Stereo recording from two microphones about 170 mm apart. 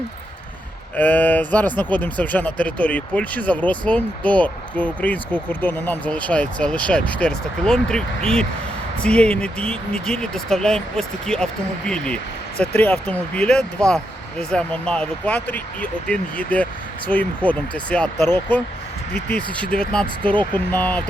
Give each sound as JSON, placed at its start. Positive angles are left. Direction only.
{"t": 0.9, "sound": "speech", "side_deg": 10}
{"t": 19.5, "sound": "speech", "side_deg": 5}
{"t": 20.3, "sound": "speech", "side_deg": -25}
{"t": 20.7, "sound": "speech", "side_deg": 10}